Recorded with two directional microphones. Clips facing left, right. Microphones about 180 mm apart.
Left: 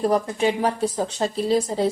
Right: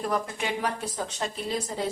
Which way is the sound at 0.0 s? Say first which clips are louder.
Left 9 dB; 30° left (ahead or behind).